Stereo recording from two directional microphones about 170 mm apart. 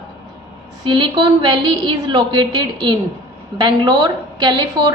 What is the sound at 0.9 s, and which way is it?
A woman's voice, 25° right (ahead or behind).